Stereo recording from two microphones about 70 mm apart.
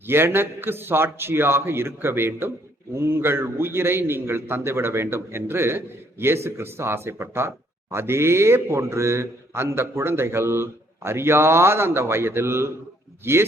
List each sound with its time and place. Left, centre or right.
0.1 s a man's voice: right